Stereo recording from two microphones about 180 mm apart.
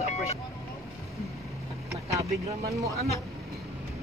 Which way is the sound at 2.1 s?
20° right (ahead or behind).